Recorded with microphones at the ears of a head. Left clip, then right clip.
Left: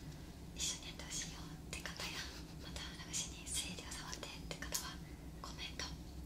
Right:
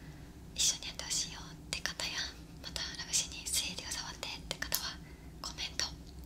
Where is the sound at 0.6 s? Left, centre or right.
Right.